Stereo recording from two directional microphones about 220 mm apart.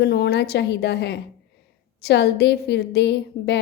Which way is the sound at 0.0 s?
45° left (ahead or behind).